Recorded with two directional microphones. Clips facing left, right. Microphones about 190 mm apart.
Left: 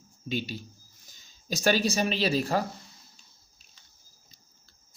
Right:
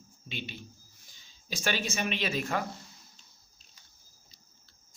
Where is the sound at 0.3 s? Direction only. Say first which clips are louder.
Left 9 dB; 40° left (ahead or behind).